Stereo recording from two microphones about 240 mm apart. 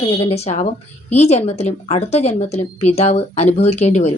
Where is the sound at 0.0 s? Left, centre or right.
Left.